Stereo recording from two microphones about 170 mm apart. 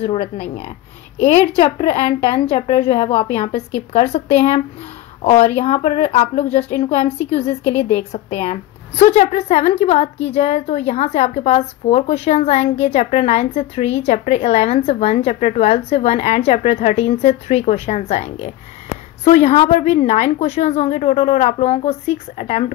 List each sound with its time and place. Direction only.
0.0 s a woman's voice: 35° left (ahead or behind)